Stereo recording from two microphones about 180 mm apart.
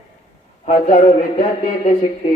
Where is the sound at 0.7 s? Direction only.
40° left (ahead or behind).